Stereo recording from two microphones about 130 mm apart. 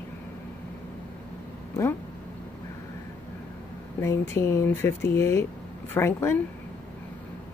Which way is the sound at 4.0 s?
20° left (ahead or behind).